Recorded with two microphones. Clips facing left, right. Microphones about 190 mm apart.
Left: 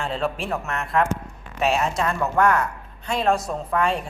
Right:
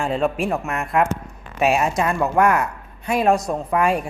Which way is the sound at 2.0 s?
15° right (ahead or behind).